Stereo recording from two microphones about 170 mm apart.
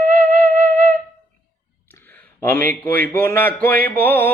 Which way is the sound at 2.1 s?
15° left (ahead or behind).